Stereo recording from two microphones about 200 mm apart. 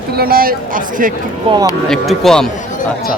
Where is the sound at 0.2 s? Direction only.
50° right (ahead or behind).